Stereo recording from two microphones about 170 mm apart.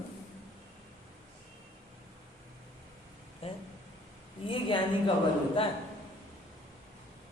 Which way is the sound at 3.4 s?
35° left (ahead or behind).